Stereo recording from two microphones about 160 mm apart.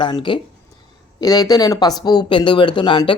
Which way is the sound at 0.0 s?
30° left (ahead or behind).